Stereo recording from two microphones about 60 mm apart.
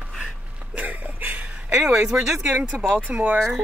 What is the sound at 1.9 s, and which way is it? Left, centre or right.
Speech, centre.